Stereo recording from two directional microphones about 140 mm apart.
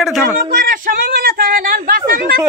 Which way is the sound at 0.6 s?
90° right.